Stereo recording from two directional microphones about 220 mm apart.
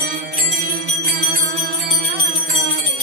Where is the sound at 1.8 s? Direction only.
45° right (ahead or behind).